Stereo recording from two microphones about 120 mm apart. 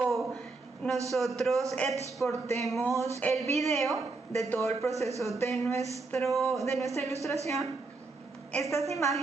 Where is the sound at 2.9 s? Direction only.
25° right (ahead or behind).